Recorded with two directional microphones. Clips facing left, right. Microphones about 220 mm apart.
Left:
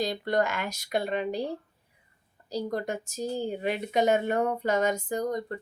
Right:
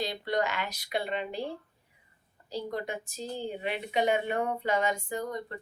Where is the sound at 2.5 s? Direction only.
40° left (ahead or behind).